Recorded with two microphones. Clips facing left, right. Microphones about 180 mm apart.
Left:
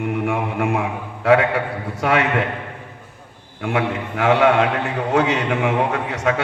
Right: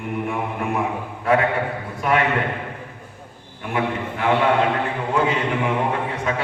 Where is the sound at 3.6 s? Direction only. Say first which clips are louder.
Left 2 dB; 85° left.